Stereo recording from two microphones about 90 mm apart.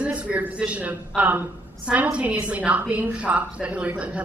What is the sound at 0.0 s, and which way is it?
A man's voice, 15° right (ahead or behind).